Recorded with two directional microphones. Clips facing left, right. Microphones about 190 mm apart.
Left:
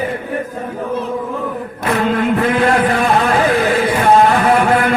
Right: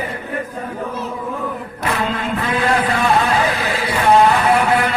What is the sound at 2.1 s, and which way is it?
Music, 50° left (ahead or behind).